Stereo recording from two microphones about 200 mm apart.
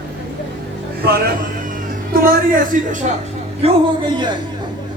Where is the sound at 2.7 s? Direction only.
40° right (ahead or behind).